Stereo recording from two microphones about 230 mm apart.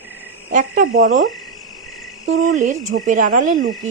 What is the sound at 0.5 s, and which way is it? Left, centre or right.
Speech, right.